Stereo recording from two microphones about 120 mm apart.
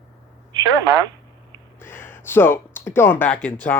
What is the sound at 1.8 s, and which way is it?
Speech, 20° left (ahead or behind).